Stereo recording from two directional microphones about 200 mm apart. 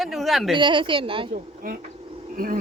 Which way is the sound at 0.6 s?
25° right (ahead or behind).